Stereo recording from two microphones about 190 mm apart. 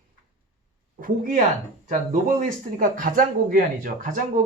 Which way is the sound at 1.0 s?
45° right (ahead or behind).